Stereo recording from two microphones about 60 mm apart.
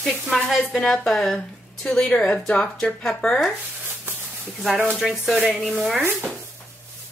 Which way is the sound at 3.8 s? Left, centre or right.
Right.